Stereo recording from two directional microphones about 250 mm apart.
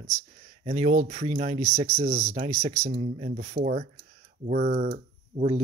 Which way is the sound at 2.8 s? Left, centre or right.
Right.